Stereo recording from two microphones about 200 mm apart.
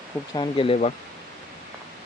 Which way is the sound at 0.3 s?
25° left (ahead or behind).